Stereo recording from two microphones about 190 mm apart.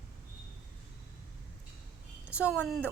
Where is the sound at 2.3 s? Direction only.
5° right (ahead or behind).